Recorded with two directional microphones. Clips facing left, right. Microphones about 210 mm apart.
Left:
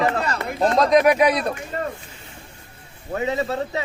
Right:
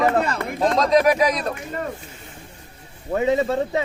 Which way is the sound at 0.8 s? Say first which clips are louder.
Left 1 dB; 30° right (ahead or behind).